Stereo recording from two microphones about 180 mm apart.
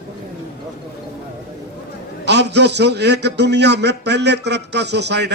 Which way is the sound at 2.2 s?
70° right (ahead or behind).